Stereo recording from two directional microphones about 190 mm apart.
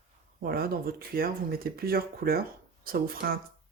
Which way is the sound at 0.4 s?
50° right (ahead or behind).